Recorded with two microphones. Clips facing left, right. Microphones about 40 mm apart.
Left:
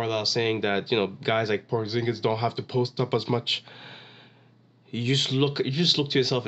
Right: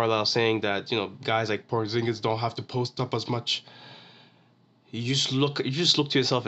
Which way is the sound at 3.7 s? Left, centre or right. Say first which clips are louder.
Left 3 dB; left.